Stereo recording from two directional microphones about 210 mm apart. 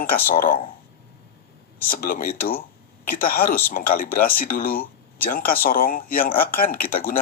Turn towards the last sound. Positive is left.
turn(degrees=40)  # may be behind; listen again after turning